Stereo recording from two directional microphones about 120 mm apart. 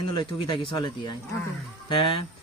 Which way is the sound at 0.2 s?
45° left (ahead or behind).